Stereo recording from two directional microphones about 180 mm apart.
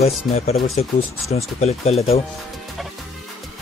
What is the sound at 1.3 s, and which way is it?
Speech, 35° left (ahead or behind).